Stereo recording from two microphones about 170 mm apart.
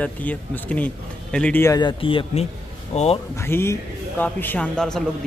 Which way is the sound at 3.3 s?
15° left (ahead or behind).